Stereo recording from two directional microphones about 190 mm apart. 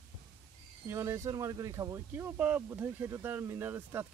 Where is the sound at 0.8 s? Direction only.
15° right (ahead or behind).